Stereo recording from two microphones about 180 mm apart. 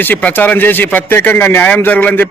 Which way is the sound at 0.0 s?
10° left (ahead or behind).